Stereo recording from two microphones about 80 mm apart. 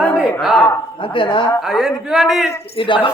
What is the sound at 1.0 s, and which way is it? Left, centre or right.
Speech, left.